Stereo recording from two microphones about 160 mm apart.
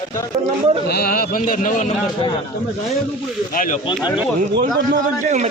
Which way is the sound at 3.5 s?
60° left (ahead or behind).